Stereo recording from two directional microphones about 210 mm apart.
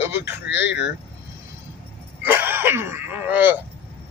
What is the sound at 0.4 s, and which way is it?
Speech, 55° left (ahead or behind).